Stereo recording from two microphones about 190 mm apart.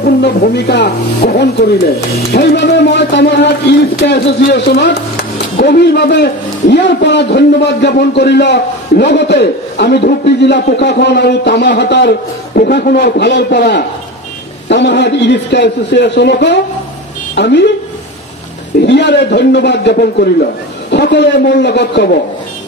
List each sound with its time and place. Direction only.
0.0 s a man's voice: 55° left (ahead or behind)
18.9 s a man's voice: 65° left (ahead or behind)